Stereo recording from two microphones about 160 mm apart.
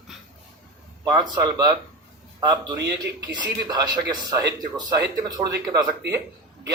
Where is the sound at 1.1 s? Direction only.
25° right (ahead or behind).